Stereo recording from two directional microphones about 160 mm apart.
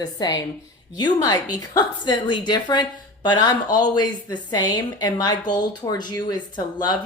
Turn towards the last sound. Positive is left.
turn(degrees=25)  # may be behind; listen again after turning